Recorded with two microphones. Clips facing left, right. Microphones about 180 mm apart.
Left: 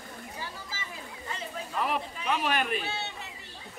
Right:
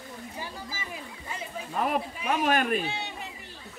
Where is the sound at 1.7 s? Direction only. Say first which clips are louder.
Right 3 dB; 45° right (ahead or behind).